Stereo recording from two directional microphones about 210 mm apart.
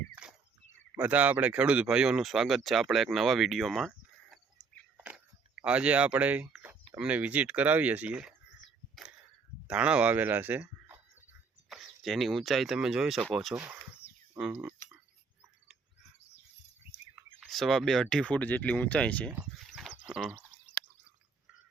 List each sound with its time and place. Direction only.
0.9 s speech: 5° right (ahead or behind)
4.9 s a sound: 5° right (ahead or behind)
5.6 s speech: 5° right (ahead or behind)
9.6 s speech: 5° right (ahead or behind)
17.4 s speech: centre (ahead or behind)
19.3 s a sound: 5° right (ahead or behind)